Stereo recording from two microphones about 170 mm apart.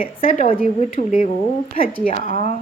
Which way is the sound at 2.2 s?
45° left (ahead or behind).